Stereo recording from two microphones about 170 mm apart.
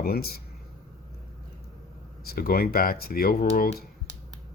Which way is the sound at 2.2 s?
60° left (ahead or behind).